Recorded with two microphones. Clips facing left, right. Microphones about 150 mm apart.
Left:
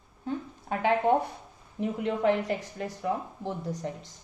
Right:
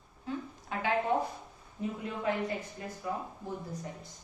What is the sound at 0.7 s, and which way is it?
Speech, 60° left (ahead or behind).